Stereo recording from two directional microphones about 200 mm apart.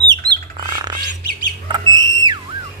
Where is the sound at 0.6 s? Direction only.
20° right (ahead or behind).